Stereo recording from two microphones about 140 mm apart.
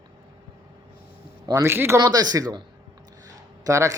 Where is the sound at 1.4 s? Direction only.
20° right (ahead or behind).